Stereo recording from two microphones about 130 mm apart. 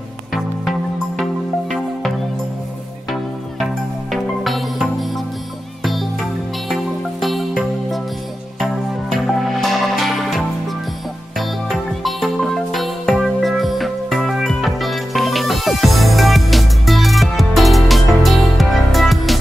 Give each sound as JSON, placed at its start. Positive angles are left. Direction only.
{"t": 0.3, "sound": "music", "side_deg": 0}
{"t": 4.1, "sound": "music", "side_deg": 0}
{"t": 6.7, "sound": "music", "side_deg": 0}
{"t": 9.1, "sound": "music", "side_deg": 0}